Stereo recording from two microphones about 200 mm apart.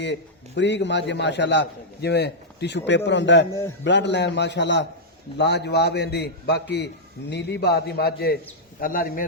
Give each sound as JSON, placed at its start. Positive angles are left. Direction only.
{"t": 0.0, "sound": "a man's voice", "side_deg": 60}